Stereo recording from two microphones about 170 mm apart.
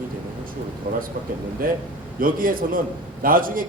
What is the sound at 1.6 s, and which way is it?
A man's voice, 55° right (ahead or behind).